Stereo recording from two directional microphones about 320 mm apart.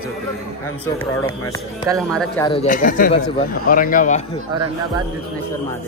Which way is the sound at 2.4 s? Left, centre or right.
Left.